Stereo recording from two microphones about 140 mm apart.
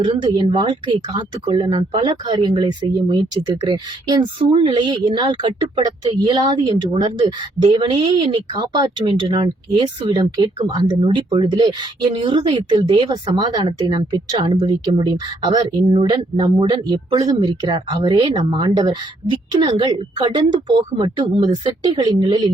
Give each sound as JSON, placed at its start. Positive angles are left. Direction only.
{"t": 0.0, "sound": "speech", "side_deg": -35}